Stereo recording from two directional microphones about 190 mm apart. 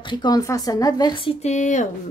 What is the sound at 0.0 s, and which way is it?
A woman's voice, 25° left (ahead or behind).